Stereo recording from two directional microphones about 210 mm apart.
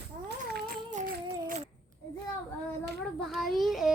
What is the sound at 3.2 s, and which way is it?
Child singing, centre (ahead or behind).